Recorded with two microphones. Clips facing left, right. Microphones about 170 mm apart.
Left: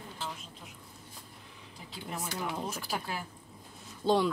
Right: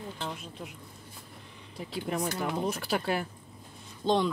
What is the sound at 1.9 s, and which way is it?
Speech, 60° right (ahead or behind).